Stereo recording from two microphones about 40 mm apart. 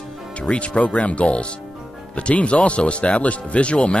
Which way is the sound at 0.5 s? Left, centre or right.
Left.